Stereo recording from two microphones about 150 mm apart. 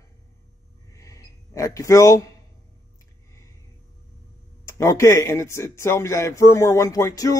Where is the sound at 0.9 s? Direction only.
20° left (ahead or behind).